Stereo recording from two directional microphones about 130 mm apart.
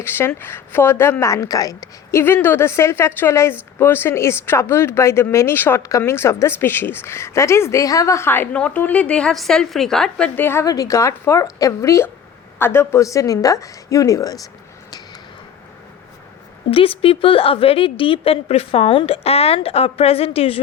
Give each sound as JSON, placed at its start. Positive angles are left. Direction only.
{"t": 0.0, "sound": "a woman's voice", "side_deg": 15}
{"t": 16.7, "sound": "a woman's voice", "side_deg": 45}